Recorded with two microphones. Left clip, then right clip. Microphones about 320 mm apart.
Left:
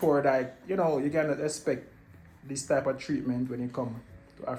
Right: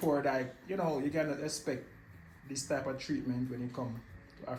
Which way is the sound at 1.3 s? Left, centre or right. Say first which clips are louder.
Left 7 dB; centre.